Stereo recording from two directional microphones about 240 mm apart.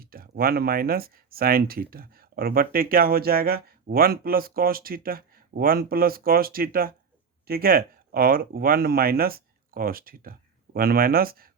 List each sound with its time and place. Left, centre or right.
0.0 s speech: right